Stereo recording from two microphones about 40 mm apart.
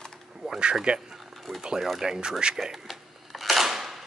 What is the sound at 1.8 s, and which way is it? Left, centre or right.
Speech, centre.